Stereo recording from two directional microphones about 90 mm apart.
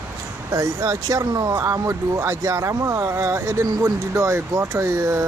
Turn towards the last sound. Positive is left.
turn(degrees=-35)  # may be behind; listen again after turning